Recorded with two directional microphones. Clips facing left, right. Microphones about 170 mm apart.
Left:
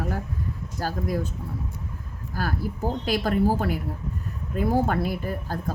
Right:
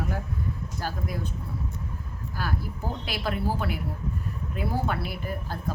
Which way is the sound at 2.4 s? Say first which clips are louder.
Left 4 dB; 45° left (ahead or behind).